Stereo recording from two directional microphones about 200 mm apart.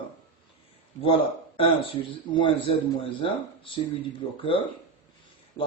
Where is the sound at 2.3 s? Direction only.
25° left (ahead or behind).